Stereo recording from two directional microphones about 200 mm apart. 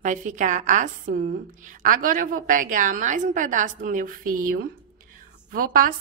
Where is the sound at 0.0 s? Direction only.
40° right (ahead or behind).